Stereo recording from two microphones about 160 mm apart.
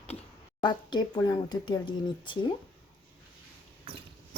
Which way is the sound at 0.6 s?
30° left (ahead or behind).